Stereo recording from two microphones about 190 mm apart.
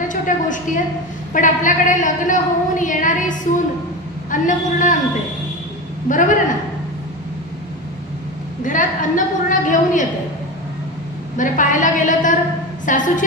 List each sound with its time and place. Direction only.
0.3 s a woman's voice: 40° left (ahead or behind)
6.0 s a woman's voice: 45° left (ahead or behind)
8.6 s a woman's voice: 45° left (ahead or behind)
11.3 s a woman's voice: 45° left (ahead or behind)